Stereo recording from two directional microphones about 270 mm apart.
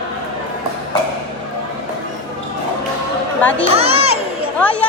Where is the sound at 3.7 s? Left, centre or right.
Right.